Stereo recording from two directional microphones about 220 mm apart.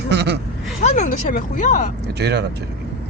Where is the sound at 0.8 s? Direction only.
35° left (ahead or behind).